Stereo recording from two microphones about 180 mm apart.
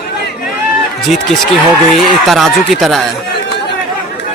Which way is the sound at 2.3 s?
Centre (ahead or behind).